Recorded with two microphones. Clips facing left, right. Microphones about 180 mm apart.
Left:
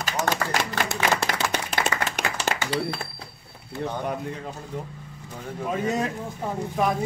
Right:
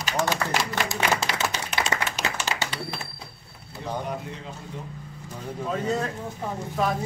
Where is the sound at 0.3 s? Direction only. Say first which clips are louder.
Left 1 dB; 55° left (ahead or behind).